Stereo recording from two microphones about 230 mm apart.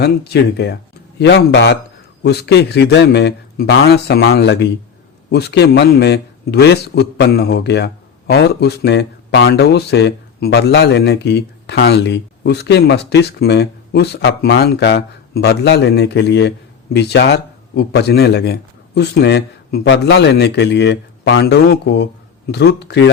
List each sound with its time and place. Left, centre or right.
0.0 s speech: left